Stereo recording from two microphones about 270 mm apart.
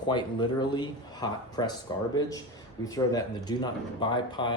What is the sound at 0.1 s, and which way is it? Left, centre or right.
Speech, centre.